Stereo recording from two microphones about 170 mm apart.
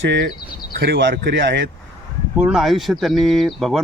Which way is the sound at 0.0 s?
90° right.